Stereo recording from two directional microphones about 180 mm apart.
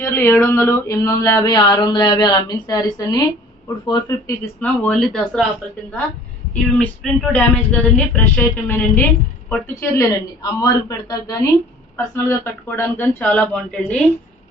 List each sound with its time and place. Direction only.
0.0 s speech: 15° left (ahead or behind)
4.6 s speech: 5° left (ahead or behind)
6.5 s speech: 5° left (ahead or behind)